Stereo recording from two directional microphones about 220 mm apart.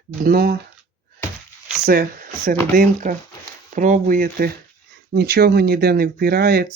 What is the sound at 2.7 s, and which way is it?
Speech, 35° right (ahead or behind).